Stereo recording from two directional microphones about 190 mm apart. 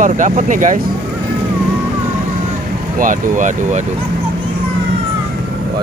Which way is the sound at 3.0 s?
40° right (ahead or behind).